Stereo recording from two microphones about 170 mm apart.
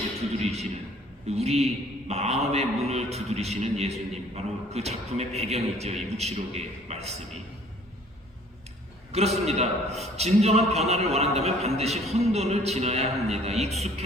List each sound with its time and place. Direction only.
0.3 s a sound: 40° right (ahead or behind)
1.4 s a man's voice: 40° right (ahead or behind)
9.1 s a man's voice: 40° right (ahead or behind)